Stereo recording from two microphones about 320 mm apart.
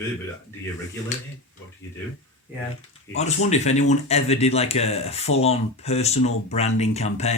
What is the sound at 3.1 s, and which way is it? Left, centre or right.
Speech, left.